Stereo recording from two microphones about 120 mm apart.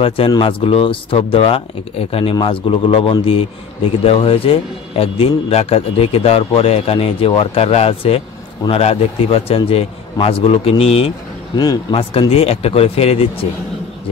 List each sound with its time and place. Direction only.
0.3 s a man's voice: 45° left (ahead or behind)
11.5 s a man's voice: 35° left (ahead or behind)
11.9 s speech: 50° left (ahead or behind)